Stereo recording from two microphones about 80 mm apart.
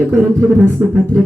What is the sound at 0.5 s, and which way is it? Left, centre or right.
Speech, right.